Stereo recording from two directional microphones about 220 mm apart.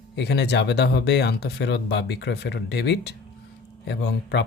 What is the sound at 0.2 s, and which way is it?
Speech, 50° left (ahead or behind).